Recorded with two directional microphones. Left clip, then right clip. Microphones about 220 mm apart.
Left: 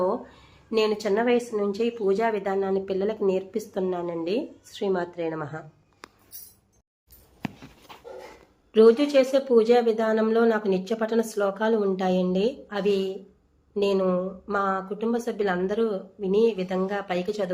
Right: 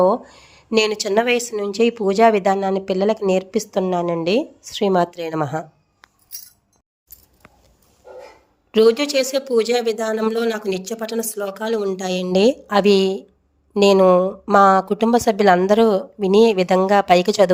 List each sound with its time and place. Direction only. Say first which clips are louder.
0.0 s speech: right 10 dB; 40° right (ahead or behind)
8.7 s speech: right 2 dB; 45° right (ahead or behind)
10.8 s speech: even; centre (ahead or behind)
11.7 s speech: right 2 dB; 50° right (ahead or behind)